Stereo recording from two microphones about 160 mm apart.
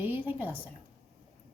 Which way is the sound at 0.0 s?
10° right (ahead or behind).